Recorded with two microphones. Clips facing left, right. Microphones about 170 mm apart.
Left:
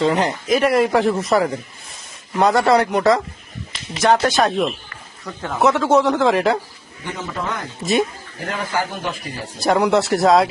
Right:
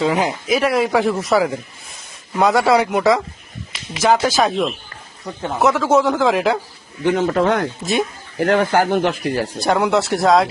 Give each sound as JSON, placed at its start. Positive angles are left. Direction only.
{"t": 0.0, "sound": "speech", "side_deg": -5}
{"t": 7.0, "sound": "speech", "side_deg": -70}
{"t": 9.6, "sound": "speech", "side_deg": 0}